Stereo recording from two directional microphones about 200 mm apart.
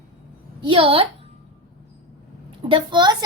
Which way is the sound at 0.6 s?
25° right (ahead or behind).